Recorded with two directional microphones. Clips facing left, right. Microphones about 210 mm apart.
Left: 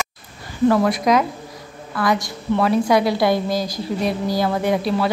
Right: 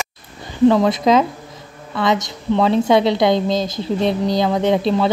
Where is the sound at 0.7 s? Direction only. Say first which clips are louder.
Right 3 dB; 20° right (ahead or behind).